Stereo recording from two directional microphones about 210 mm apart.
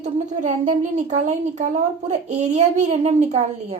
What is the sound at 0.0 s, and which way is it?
A woman's voice, 35° right (ahead or behind).